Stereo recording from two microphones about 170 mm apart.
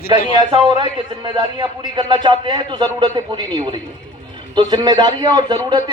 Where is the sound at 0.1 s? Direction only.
25° right (ahead or behind).